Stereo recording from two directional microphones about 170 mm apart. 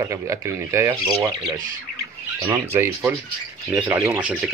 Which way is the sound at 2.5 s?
15° right (ahead or behind).